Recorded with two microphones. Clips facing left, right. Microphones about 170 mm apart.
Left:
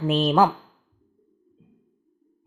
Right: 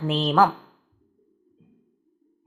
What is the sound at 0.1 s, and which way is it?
Speech, 15° left (ahead or behind).